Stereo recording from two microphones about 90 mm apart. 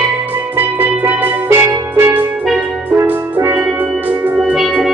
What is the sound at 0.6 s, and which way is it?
Music, 20° right (ahead or behind).